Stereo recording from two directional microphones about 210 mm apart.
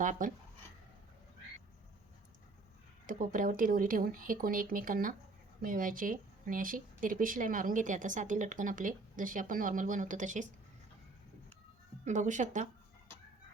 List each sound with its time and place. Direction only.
0.0 s speech: 40° right (ahead or behind)
3.1 s speech: 40° right (ahead or behind)
12.0 s speech: 35° right (ahead or behind)